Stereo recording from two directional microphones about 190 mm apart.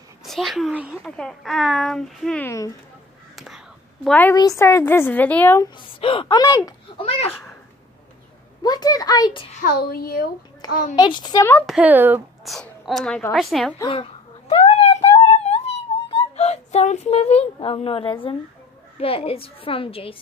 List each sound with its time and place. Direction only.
0.2 s speech: centre (ahead or behind)
3.3 s whispering: centre (ahead or behind)
4.4 s a woman's voice: 15° left (ahead or behind)
5.8 s a woman's voice: 30° left (ahead or behind)
7.0 s a child's voice: 30° left (ahead or behind)
8.6 s a child's voice: 20° left (ahead or behind)
9.6 s a woman's voice: 50° left (ahead or behind)
10.7 s a woman's voice: 45° left (ahead or behind)
11.0 s a woman's voice: 25° left (ahead or behind)
11.6 s speech: 5° right (ahead or behind)
12.5 s speech: centre (ahead or behind)
13.7 s a sound: 30° left (ahead or behind)
18.9 s a woman's voice: 30° left (ahead or behind)